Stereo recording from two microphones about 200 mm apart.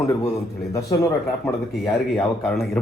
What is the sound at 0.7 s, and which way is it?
Speech, 15° left (ahead or behind).